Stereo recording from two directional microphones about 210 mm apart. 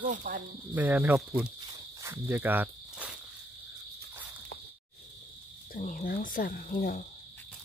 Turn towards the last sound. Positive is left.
turn(degrees=40)  # may be behind; listen again after turning